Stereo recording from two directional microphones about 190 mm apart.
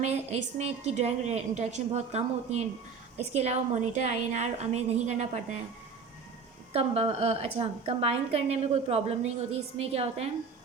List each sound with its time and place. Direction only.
0.0 s a woman's voice: 35° right (ahead or behind)
6.7 s a woman's voice: 30° right (ahead or behind)